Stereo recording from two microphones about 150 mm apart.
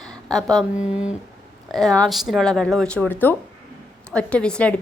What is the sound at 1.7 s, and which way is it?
A woman's voice, 5° left (ahead or behind).